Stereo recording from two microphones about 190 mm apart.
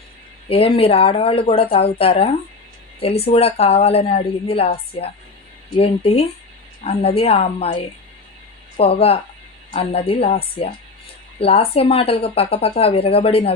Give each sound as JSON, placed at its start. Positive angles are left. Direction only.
{"t": 0.4, "sound": "speech", "side_deg": 30}